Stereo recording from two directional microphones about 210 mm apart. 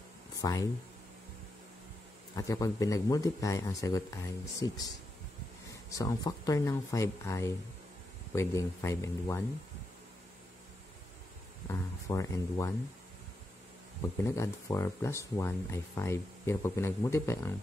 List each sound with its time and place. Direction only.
0.4 s speech: 15° left (ahead or behind)
2.3 s speech: 15° left (ahead or behind)
11.7 s speech: 15° left (ahead or behind)
14.2 s speech: 15° left (ahead or behind)